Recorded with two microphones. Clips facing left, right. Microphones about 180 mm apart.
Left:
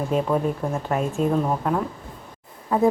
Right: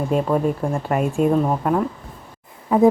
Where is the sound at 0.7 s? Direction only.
Centre (ahead or behind).